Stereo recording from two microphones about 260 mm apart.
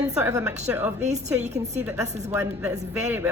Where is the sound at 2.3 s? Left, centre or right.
Centre.